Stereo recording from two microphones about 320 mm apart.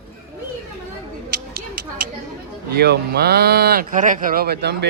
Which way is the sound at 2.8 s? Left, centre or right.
Right.